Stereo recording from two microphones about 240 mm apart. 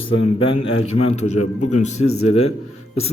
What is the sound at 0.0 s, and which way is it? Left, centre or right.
A man's voice, left.